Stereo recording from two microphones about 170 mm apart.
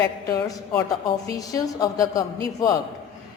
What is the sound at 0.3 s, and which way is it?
A woman's voice, 20° left (ahead or behind).